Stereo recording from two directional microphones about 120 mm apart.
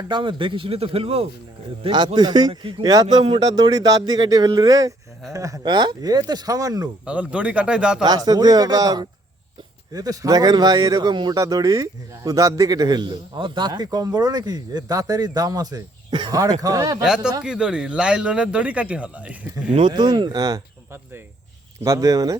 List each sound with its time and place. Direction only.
0.1 s speech: 40° right (ahead or behind)
1.8 s speech: 40° right (ahead or behind)
3.4 s speech: 35° right (ahead or behind)
7.0 s speech: 10° right (ahead or behind)
8.0 s speech: 35° right (ahead or behind)
16.3 s speech: 30° right (ahead or behind)
17.4 s speech: 10° right (ahead or behind)
19.9 s speech: 35° right (ahead or behind)
21.8 s speech: 30° right (ahead or behind)